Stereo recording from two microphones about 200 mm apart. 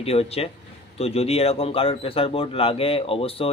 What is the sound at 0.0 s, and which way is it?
Speech, 30° left (ahead or behind).